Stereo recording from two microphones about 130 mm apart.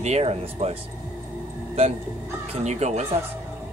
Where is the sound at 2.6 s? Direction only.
60° right (ahead or behind).